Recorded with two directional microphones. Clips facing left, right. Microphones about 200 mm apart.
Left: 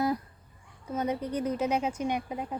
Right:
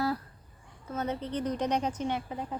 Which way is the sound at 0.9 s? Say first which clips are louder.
Left 2 dB; 10° left (ahead or behind).